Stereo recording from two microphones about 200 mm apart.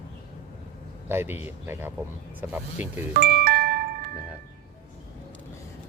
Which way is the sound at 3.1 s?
50° right (ahead or behind).